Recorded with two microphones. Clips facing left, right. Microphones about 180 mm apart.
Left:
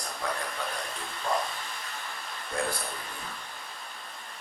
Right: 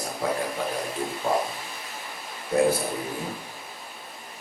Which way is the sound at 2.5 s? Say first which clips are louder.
Right 11 dB; 20° right (ahead or behind).